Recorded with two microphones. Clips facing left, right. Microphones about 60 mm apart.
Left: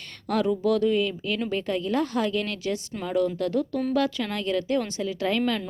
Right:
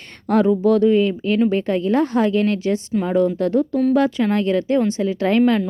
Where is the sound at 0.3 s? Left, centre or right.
Right.